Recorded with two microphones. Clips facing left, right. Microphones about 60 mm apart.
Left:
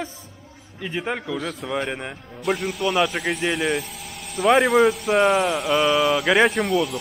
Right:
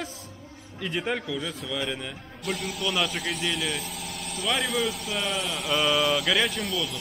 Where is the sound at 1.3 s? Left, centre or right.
Left.